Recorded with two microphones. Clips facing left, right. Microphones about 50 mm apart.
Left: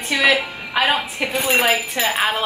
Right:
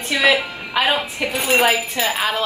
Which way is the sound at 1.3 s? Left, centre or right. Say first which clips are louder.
Right 1 dB; centre.